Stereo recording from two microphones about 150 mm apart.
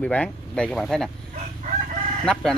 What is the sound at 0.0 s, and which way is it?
Speech, 10° left (ahead or behind).